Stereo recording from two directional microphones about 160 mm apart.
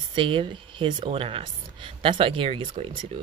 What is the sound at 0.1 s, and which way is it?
Speech, 30° right (ahead or behind).